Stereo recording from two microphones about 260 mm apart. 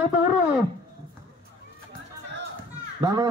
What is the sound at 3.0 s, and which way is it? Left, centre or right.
Speech, centre.